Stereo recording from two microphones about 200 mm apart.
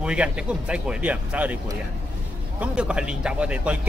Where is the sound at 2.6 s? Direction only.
5° right (ahead or behind).